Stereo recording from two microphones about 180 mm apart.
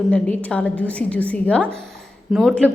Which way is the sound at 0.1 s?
5° left (ahead or behind).